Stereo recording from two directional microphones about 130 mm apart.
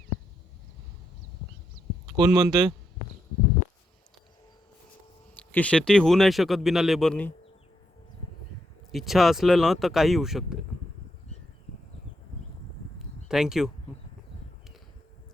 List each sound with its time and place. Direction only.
2.1 s speech: 30° right (ahead or behind)
5.4 s speech: 10° left (ahead or behind)
8.9 s speech: centre (ahead or behind)
13.2 s speech: 5° right (ahead or behind)